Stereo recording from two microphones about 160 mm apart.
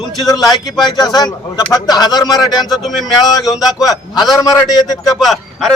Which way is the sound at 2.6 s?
Centre (ahead or behind).